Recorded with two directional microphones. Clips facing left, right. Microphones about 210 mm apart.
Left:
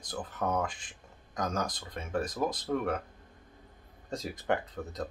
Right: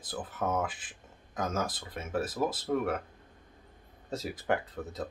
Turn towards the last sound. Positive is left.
turn(degrees=-5)  # may be behind; listen again after turning